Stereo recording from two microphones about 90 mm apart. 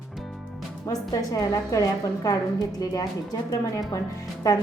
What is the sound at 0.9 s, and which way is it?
A woman's voice, 40° left (ahead or behind).